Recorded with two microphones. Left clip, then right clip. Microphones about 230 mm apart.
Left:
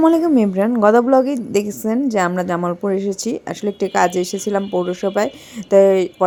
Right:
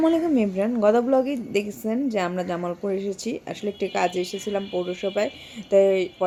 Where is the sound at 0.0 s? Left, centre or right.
Left.